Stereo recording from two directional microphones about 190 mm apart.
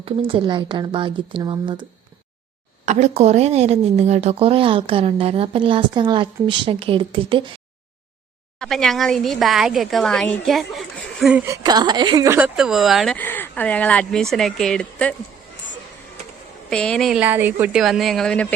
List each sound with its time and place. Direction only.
0.0 s speech: 30° right (ahead or behind)
2.8 s speech: 35° right (ahead or behind)
8.5 s speech: centre (ahead or behind)
11.4 s speech: 20° right (ahead or behind)
12.5 s speech: centre (ahead or behind)
13.1 s speech: 10° left (ahead or behind)
16.6 s speech: 5° left (ahead or behind)